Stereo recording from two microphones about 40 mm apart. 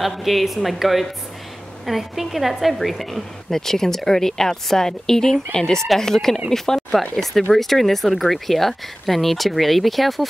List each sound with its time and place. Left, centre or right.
0.0 s a woman's voice: centre